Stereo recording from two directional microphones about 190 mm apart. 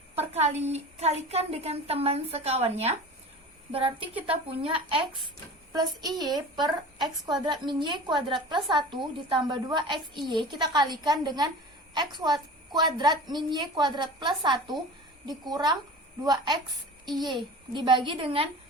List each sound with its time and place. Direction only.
0.2 s a woman's voice: 35° right (ahead or behind)